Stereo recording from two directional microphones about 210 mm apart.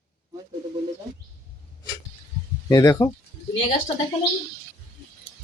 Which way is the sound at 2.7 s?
15° left (ahead or behind).